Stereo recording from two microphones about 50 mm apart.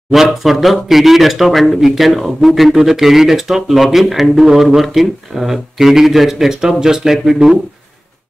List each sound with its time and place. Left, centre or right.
0.1 s speech: centre